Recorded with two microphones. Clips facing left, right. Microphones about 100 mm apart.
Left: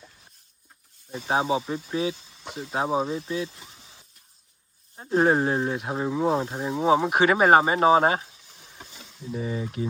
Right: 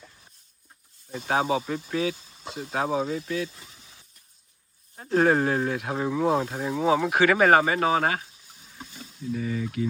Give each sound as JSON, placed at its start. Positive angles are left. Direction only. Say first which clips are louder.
{"t": 1.3, "sound": "speech", "louder": "even", "side_deg": 25}
{"t": 2.1, "sound": "a sound", "louder": "even", "side_deg": -5}
{"t": 2.4, "sound": "speech", "louder": "even", "side_deg": 20}
{"t": 4.9, "sound": "speech", "louder": "even", "side_deg": 20}
{"t": 9.3, "sound": "speech", "louder": "right 1 dB", "side_deg": 25}